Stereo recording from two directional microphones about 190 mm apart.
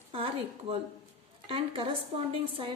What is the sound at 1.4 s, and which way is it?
Speech, 30° right (ahead or behind).